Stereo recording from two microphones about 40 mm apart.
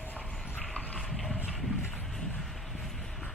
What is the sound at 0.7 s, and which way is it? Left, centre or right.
Horse, left.